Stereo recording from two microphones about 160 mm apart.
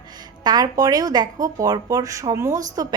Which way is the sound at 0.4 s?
25° right (ahead or behind).